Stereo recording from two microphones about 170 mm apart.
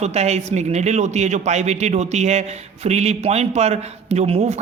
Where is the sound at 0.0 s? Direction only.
40° right (ahead or behind).